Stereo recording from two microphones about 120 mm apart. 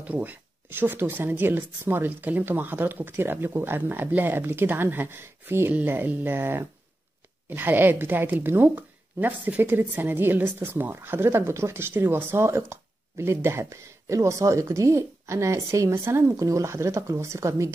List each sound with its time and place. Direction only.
0.0 s speech: 10° right (ahead or behind)